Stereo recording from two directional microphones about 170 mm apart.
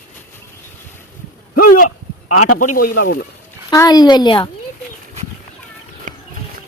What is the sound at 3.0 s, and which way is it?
Speech, 65° left (ahead or behind).